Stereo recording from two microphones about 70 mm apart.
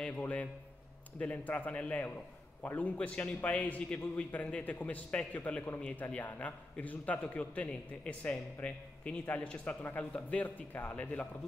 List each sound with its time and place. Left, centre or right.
0.2 s a man's voice: left